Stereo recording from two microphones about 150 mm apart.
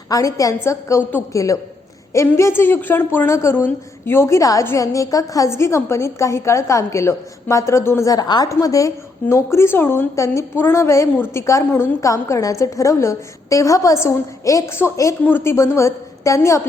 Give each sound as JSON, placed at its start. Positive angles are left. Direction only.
{"t": 0.1, "sound": "a woman's voice", "side_deg": 20}